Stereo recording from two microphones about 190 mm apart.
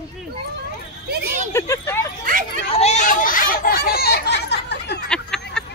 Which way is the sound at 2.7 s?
35° left (ahead or behind).